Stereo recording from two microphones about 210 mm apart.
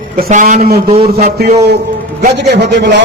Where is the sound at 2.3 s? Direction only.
55° right (ahead or behind).